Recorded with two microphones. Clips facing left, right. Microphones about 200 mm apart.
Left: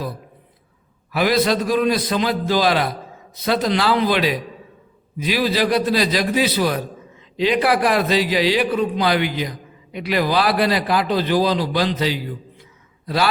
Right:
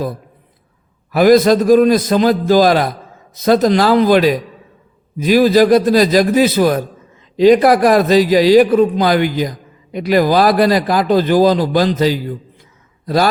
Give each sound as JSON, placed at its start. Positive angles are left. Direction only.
{"t": 1.1, "sound": "a man's voice", "side_deg": -45}